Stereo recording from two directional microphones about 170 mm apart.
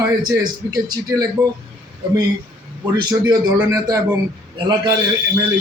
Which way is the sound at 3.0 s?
25° right (ahead or behind).